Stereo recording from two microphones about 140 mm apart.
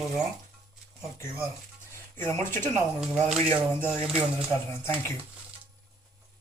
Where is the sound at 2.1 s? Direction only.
15° left (ahead or behind).